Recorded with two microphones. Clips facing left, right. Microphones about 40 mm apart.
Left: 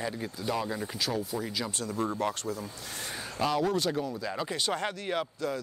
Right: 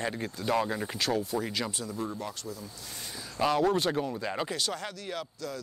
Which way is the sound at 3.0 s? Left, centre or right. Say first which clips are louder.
Left 5 dB; left.